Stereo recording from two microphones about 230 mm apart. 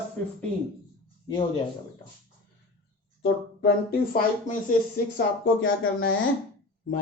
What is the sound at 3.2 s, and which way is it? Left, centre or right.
Speech, left.